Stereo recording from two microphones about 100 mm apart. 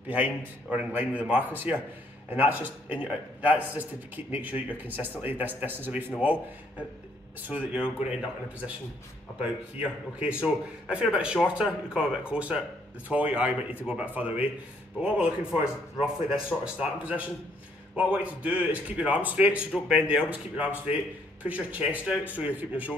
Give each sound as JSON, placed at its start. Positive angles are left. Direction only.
{"t": 0.1, "sound": "a man's voice", "side_deg": -15}
{"t": 7.4, "sound": "a man's voice", "side_deg": -15}